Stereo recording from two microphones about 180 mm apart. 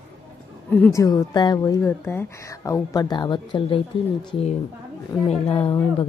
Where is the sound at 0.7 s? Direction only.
10° left (ahead or behind); by 4.5 s 25° left (ahead or behind).